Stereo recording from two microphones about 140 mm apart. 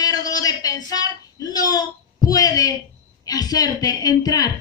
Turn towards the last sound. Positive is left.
turn(degrees=25)  # may be behind; listen again after turning